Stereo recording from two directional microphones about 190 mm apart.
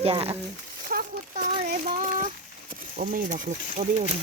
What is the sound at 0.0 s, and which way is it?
Speech, 30° right (ahead or behind).